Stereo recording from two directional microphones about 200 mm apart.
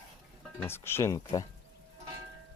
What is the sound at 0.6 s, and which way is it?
Speech, 10° left (ahead or behind).